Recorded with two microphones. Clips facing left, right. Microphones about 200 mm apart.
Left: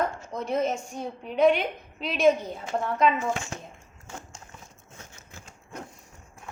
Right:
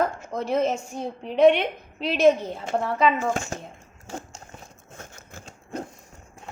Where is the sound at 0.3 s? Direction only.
Centre (ahead or behind).